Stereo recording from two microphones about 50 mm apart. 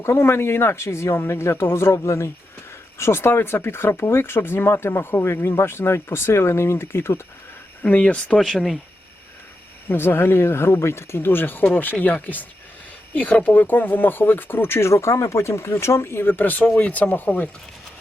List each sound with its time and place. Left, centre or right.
0.0 s speech: left
3.0 s speech: left
7.9 s speech: left
8.4 s speech: centre
9.8 s speech: left